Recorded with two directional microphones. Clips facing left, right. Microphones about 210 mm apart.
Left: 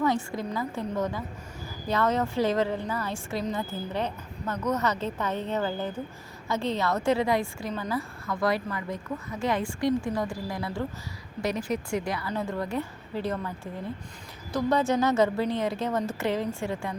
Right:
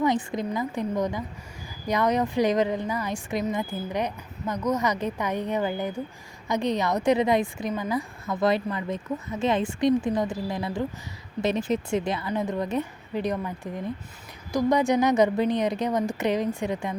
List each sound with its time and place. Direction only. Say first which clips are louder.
0.0 s a woman's voice: right 2 dB; 15° right (ahead or behind)